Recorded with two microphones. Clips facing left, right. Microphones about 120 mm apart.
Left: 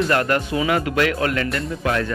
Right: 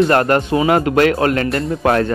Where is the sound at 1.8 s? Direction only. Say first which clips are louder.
Right 7 dB; 45° right (ahead or behind).